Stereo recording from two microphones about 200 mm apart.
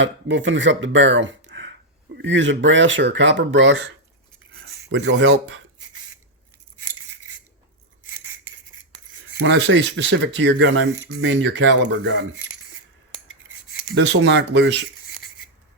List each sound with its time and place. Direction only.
0.0 s speech: 65° right (ahead or behind)
4.9 s speech: 65° right (ahead or behind)
9.5 s speech: 65° right (ahead or behind)
13.8 s speech: 65° right (ahead or behind)